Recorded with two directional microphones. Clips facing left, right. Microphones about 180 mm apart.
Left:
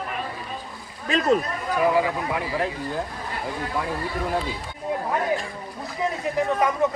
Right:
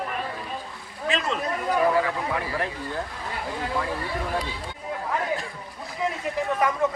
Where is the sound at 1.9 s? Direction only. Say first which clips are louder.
Left 2 dB; 15° left (ahead or behind).